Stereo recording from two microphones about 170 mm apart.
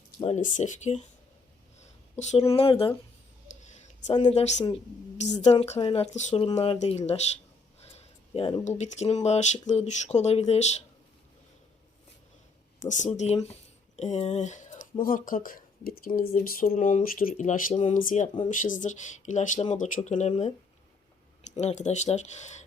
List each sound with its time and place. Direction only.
0.2 s speech: 40° left (ahead or behind)
1.8 s a sound: 40° left (ahead or behind)
2.6 s speech: 35° left (ahead or behind)
3.6 s a sound: 45° left (ahead or behind)
4.2 s speech: 40° left (ahead or behind)
7.8 s a sound: 35° left (ahead or behind)
8.6 s speech: 40° left (ahead or behind)
12.8 s speech: 45° left (ahead or behind)
21.6 s speech: 45° left (ahead or behind)